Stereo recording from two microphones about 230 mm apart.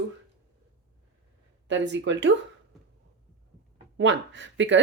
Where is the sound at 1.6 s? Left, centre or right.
Right.